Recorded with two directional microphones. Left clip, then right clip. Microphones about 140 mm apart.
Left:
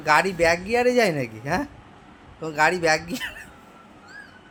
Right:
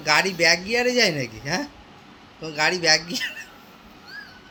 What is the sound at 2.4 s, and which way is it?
Speech, 5° left (ahead or behind).